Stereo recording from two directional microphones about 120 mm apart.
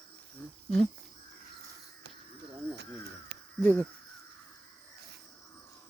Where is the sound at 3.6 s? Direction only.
15° left (ahead or behind).